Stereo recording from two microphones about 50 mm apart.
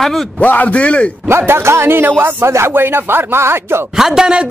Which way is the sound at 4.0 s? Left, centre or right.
Centre.